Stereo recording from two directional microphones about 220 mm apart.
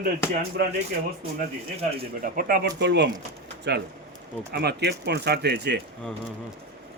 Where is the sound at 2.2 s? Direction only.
40° right (ahead or behind).